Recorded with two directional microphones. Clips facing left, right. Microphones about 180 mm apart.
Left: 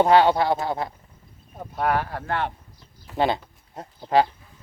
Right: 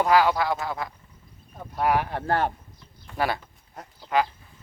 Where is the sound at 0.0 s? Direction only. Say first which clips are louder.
Left 4 dB; 30° left (ahead or behind).